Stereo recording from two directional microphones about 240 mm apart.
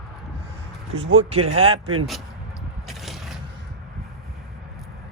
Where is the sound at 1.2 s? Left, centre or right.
Right.